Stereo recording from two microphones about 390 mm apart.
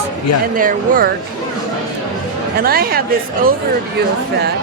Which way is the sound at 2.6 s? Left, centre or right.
Right.